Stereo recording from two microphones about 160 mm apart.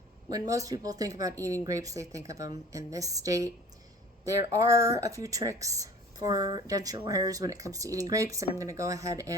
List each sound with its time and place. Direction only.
0.3 s speech: 20° right (ahead or behind)